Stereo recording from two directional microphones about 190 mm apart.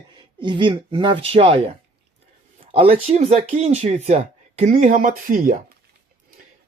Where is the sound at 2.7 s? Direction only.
30° right (ahead or behind); by 5.6 s 50° right (ahead or behind).